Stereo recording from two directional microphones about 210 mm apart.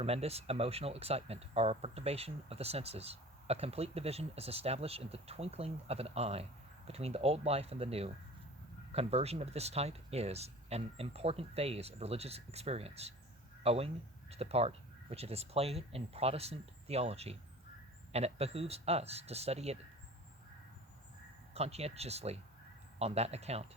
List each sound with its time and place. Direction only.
0.0 s speech: 30° right (ahead or behind)
21.5 s speech: 30° right (ahead or behind)